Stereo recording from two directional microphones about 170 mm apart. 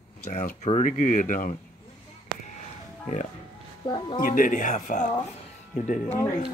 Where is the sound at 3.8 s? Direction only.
25° left (ahead or behind).